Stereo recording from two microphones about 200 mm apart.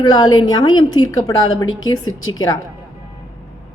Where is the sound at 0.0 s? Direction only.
20° left (ahead or behind).